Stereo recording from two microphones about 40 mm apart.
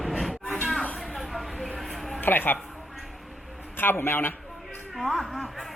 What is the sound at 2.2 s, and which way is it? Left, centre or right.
Speech, left.